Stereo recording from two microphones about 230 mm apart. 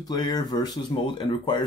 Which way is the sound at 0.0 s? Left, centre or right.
Centre.